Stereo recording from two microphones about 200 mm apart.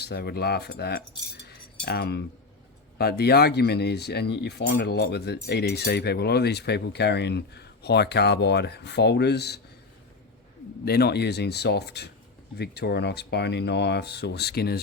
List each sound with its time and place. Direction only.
0.0 s cutlery: 55° left (ahead or behind)
3.0 s speech: 50° left (ahead or behind)
10.8 s speech: 55° left (ahead or behind)